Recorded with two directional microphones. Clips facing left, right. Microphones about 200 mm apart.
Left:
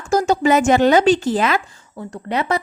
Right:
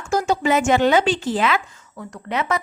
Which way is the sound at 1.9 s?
30° left (ahead or behind).